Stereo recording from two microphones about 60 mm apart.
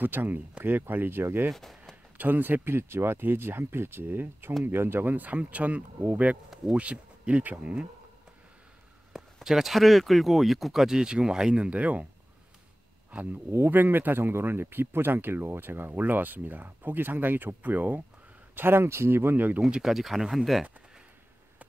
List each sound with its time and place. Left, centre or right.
0.0 s speech: right
1.5 s speech: centre
2.1 s speech: right
5.1 s speech: right
9.1 s speech: centre
13.1 s speech: right
13.5 s speech: right
19.8 s speech: centre